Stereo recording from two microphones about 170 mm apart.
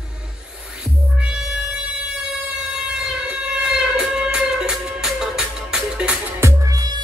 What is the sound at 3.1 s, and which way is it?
Music, 5° right (ahead or behind).